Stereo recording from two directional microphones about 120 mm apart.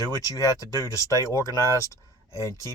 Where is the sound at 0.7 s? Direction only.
30° right (ahead or behind).